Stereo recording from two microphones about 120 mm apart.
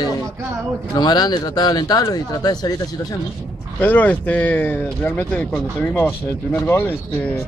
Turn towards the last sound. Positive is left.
turn(degrees=20)  # may be behind; listen again after turning